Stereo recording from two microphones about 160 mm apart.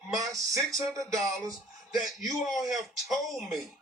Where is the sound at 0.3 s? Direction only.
Centre (ahead or behind).